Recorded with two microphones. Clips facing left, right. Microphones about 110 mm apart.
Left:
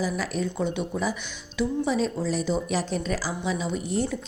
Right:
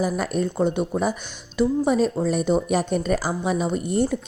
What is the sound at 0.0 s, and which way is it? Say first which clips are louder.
Speech: right 4 dB; 50° right (ahead or behind).